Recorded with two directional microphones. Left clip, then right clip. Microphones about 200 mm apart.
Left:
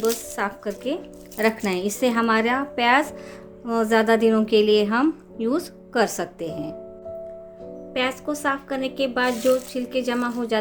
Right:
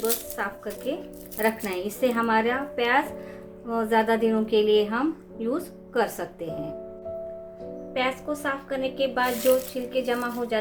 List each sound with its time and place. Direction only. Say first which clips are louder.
0.3 s a woman's voice: left 4 dB; 55° left (ahead or behind)
7.9 s a woman's voice: left 2 dB; 60° left (ahead or behind)